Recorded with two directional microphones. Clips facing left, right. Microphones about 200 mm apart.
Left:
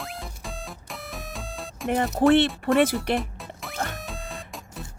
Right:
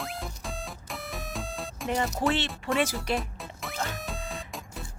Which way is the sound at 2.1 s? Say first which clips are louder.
Left 9 dB; 55° left (ahead or behind).